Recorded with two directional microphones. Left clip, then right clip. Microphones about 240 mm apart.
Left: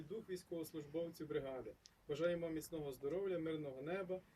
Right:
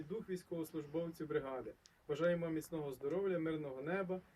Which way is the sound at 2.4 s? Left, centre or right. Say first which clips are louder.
Right 3 dB; centre.